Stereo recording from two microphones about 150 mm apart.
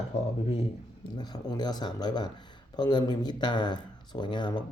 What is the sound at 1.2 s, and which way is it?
Speech, 25° left (ahead or behind).